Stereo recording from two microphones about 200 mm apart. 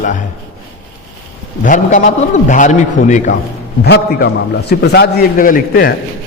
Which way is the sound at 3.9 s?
55° left (ahead or behind).